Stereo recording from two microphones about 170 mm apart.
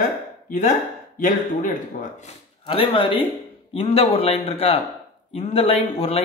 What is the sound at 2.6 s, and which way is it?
Speech, 30° left (ahead or behind).